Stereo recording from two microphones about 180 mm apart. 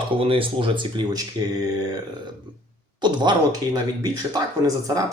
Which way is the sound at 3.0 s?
25° right (ahead or behind).